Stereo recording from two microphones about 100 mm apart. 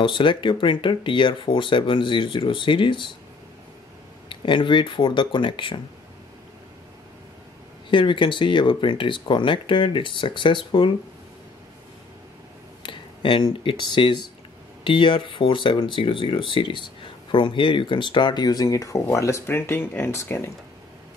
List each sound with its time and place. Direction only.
0.0 s speech: 55° left (ahead or behind)
4.3 s speech: 55° left (ahead or behind)
7.9 s speech: 55° left (ahead or behind)
12.8 s speech: 55° left (ahead or behind); by 20.5 s 30° left (ahead or behind)